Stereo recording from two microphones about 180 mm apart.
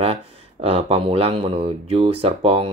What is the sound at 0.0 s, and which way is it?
Speech, 35° right (ahead or behind).